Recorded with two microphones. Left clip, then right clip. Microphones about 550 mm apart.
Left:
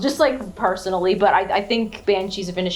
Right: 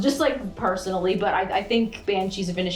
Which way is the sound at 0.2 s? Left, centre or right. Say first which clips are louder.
Left 5 dB; left.